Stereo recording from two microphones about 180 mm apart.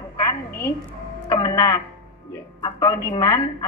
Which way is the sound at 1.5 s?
15° left (ahead or behind).